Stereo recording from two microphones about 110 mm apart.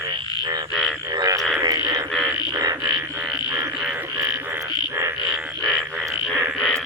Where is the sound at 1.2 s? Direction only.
35° right (ahead or behind).